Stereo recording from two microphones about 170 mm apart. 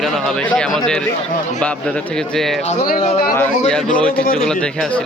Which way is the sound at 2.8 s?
50° left (ahead or behind).